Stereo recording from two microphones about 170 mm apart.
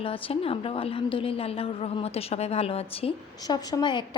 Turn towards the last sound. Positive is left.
turn(degrees=25)  # may be behind; listen again after turning